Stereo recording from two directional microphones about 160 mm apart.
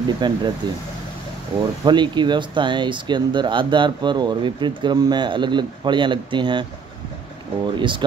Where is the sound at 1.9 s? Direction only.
30° right (ahead or behind).